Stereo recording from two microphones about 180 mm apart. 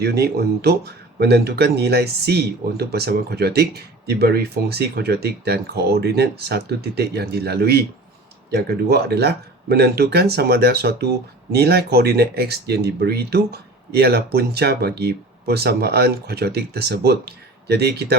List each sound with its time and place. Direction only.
0.0 s speech: 60° right (ahead or behind)